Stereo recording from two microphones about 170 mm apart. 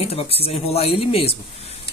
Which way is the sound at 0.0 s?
35° left (ahead or behind).